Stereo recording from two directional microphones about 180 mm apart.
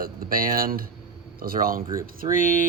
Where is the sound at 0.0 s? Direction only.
55° right (ahead or behind).